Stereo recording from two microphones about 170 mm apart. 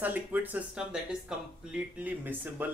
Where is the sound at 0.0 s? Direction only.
10° right (ahead or behind).